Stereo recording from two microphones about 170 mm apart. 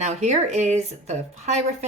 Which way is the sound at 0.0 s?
40° right (ahead or behind).